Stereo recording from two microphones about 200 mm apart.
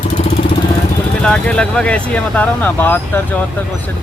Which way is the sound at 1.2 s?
5° left (ahead or behind).